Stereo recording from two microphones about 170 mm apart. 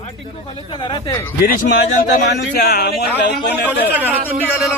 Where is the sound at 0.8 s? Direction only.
25° left (ahead or behind).